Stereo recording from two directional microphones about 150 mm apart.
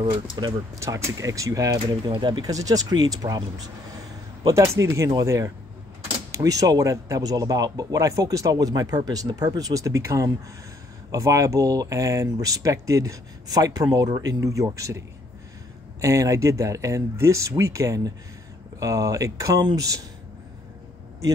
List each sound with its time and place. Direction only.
0.0 s speech: 30° right (ahead or behind)
0.7 s speech: 20° right (ahead or behind)
16.0 s speech: 20° right (ahead or behind)